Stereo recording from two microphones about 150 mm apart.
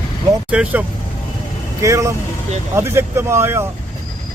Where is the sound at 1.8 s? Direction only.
20° right (ahead or behind).